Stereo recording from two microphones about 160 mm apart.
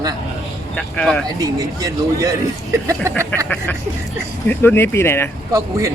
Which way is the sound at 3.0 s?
20° right (ahead or behind).